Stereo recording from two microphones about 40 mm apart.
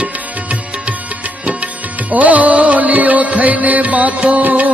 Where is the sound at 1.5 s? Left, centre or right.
Right.